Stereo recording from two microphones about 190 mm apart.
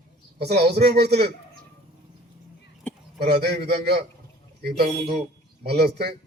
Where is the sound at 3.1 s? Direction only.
60° right (ahead or behind).